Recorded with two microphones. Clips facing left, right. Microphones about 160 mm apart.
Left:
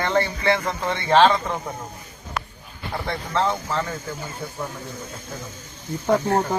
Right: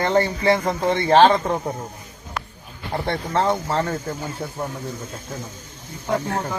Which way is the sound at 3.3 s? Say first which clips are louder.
Right 2 dB; 40° right (ahead or behind).